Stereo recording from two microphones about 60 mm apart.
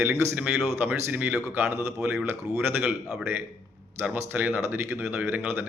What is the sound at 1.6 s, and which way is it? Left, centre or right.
Speech, right.